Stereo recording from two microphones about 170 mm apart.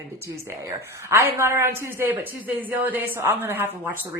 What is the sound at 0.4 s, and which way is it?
A woman's voice, 15° right (ahead or behind).